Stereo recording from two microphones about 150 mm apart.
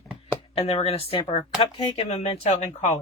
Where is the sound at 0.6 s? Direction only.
40° left (ahead or behind).